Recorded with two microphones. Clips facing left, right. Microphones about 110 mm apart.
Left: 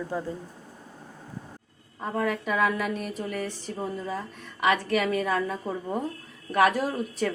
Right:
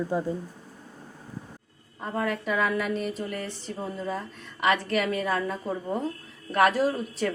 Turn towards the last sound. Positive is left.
turn(degrees=10)  # may be behind; listen again after turning